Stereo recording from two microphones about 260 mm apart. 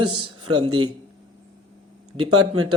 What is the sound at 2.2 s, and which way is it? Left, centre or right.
Speech, right.